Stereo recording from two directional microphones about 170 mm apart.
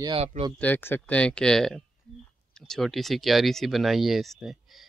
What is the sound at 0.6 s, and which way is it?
Speech, 10° left (ahead or behind).